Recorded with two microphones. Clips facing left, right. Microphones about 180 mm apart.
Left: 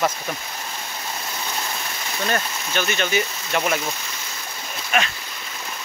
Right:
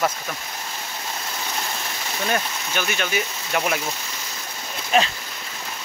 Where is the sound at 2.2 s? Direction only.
10° right (ahead or behind).